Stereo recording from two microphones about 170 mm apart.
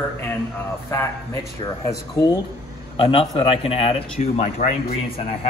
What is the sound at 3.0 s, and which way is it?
Speech, 30° left (ahead or behind).